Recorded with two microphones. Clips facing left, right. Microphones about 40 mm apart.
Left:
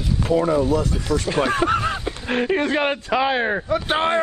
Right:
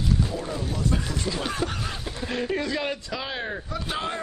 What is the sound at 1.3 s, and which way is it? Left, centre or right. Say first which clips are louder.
Honk: left 12 dB; left.